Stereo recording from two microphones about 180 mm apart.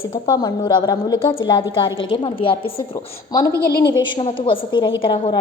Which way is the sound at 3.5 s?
60° left (ahead or behind).